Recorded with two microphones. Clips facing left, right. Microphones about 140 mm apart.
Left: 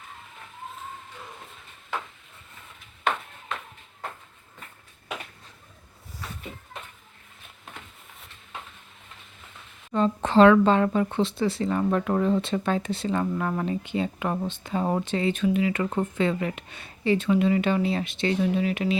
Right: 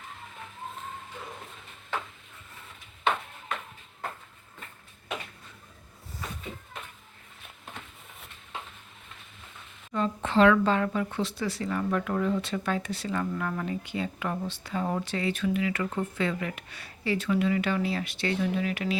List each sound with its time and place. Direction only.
9.9 s a woman's voice: 30° left (ahead or behind)